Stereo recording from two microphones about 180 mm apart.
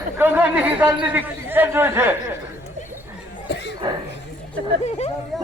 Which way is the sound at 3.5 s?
70° left (ahead or behind).